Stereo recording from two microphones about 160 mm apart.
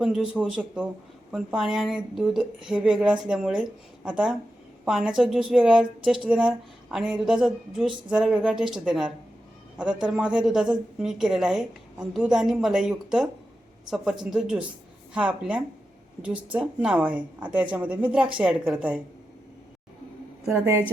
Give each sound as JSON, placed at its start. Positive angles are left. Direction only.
{"t": 0.0, "sound": "a woman's voice", "side_deg": -5}
{"t": 20.5, "sound": "a woman's voice", "side_deg": -15}